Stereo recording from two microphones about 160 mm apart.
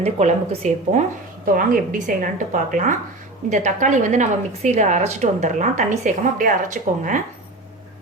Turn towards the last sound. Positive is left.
turn(degrees=-55)  # may be behind; listen again after turning